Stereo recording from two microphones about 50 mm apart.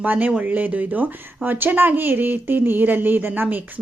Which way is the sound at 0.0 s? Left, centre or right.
Right.